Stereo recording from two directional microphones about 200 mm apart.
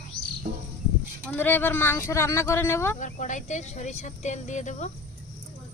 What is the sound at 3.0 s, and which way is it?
Speech, 40° left (ahead or behind).